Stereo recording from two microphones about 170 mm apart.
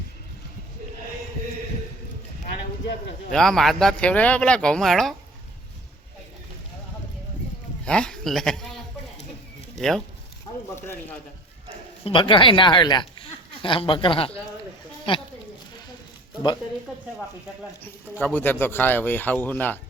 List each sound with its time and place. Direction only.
3.3 s speech: centre (ahead or behind)
7.9 s speech: 5° left (ahead or behind)
12.0 s speech: 30° left (ahead or behind)
18.2 s speech: 10° left (ahead or behind)